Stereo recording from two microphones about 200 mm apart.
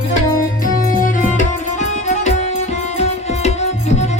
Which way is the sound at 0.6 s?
40° left (ahead or behind).